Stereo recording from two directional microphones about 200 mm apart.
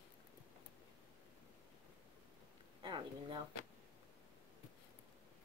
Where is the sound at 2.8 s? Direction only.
25° right (ahead or behind).